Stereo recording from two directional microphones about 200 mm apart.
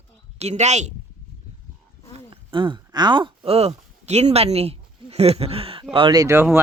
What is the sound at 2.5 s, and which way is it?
Speech, 25° right (ahead or behind).